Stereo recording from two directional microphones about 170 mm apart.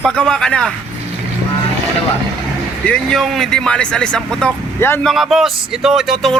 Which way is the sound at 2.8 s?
5° left (ahead or behind).